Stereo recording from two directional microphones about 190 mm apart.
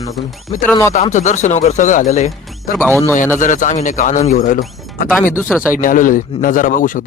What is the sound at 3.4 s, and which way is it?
Speech, 40° left (ahead or behind).